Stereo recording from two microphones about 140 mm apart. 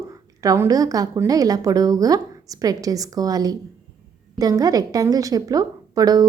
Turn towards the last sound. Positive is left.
turn(degrees=-25)  # may be behind; listen again after turning